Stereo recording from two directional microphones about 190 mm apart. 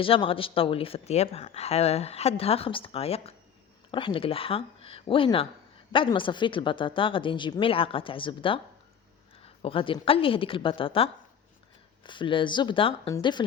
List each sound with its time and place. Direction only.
0.0 s speech: 30° left (ahead or behind)